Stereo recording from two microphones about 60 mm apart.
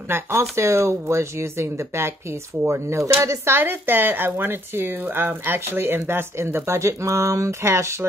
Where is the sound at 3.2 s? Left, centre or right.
Right.